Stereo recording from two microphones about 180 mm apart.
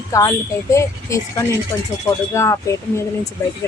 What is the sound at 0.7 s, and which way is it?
Speech, 15° left (ahead or behind).